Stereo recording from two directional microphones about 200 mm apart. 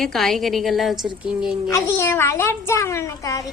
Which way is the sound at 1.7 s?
10° left (ahead or behind).